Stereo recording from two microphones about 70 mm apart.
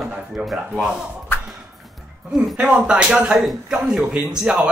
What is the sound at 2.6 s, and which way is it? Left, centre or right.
Speech, centre.